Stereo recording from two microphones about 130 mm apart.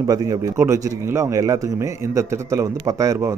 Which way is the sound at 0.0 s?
30° right (ahead or behind).